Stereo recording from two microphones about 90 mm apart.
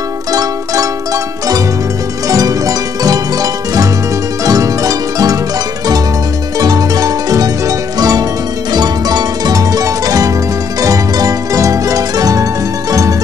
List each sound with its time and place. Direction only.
0.3 s music: 40° right (ahead or behind)
6.6 s music: 45° right (ahead or behind)